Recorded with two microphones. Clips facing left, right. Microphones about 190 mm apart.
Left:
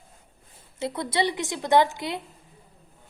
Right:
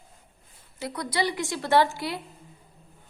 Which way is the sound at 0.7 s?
25° left (ahead or behind).